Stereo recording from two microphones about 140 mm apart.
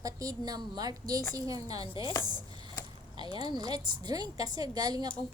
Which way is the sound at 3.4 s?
30° right (ahead or behind).